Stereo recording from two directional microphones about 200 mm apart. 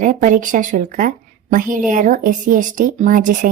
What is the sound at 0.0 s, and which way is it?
Speech, 40° right (ahead or behind).